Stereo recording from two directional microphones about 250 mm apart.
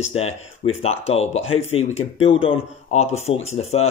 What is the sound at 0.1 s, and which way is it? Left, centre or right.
Speech, left.